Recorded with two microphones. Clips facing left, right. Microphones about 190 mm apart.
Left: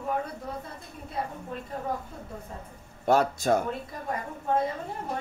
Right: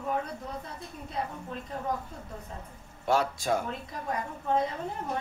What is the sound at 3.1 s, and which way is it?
Speech, 45° left (ahead or behind).